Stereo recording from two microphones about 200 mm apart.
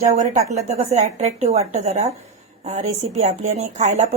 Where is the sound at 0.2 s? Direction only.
35° right (ahead or behind).